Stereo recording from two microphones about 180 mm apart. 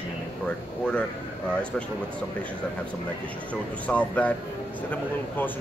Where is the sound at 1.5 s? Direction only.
5° left (ahead or behind).